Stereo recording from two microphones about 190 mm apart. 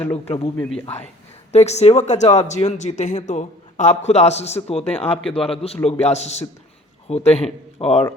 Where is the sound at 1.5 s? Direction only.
35° left (ahead or behind).